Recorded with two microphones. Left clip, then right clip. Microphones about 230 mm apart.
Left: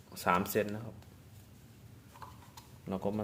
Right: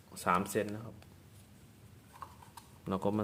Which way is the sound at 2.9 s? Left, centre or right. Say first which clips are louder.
Right 2 dB; right.